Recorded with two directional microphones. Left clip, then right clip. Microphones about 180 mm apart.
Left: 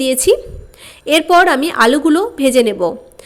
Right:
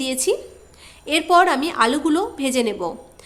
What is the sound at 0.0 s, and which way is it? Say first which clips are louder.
A woman's voice: left 9 dB; 30° left (ahead or behind).